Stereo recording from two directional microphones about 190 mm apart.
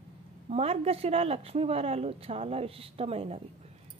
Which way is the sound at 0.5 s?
30° right (ahead or behind).